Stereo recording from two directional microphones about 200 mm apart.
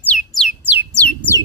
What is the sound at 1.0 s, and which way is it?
Bird, 10° left (ahead or behind).